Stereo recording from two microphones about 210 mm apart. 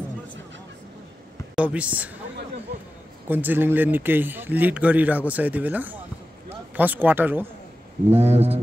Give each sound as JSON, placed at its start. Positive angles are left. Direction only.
{"t": 1.5, "sound": "speech", "side_deg": -5}
{"t": 3.3, "sound": "speech", "side_deg": -10}
{"t": 8.2, "sound": "speech", "side_deg": -30}